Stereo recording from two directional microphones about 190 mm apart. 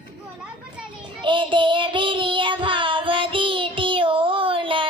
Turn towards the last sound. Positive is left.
turn(degrees=-25)  # may be behind; listen again after turning